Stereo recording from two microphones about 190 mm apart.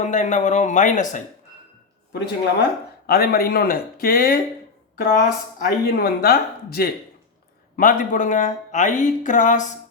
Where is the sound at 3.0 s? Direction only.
55° left (ahead or behind).